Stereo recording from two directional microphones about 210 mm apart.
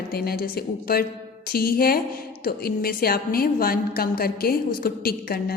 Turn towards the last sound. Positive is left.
turn(degrees=45)  # may be behind; listen again after turning